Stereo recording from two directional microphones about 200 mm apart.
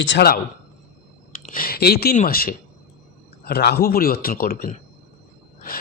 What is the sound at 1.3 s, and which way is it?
Speech, 40° left (ahead or behind).